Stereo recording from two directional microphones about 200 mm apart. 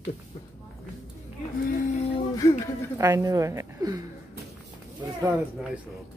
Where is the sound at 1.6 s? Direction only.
50° left (ahead or behind).